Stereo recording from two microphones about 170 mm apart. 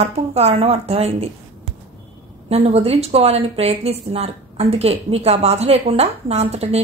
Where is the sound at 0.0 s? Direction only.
40° right (ahead or behind).